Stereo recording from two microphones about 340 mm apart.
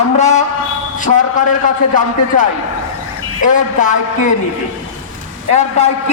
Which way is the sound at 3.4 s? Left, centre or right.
Left.